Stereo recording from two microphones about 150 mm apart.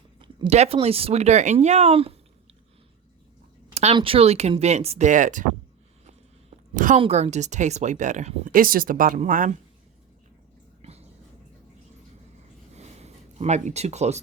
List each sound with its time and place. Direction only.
0.2 s speech: 35° right (ahead or behind)
3.9 s speech: 40° right (ahead or behind); by 5.5 s 60° right (ahead or behind)
6.1 s a sound: 55° right (ahead or behind)
7.0 s speech: 45° right (ahead or behind)
8.5 s speech: 70° right (ahead or behind)
12.7 s a sound: 45° right (ahead or behind)